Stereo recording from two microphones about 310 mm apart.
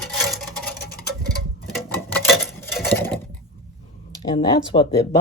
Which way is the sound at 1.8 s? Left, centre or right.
Centre.